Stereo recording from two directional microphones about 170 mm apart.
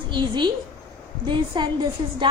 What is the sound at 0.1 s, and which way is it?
A woman's voice, 25° right (ahead or behind).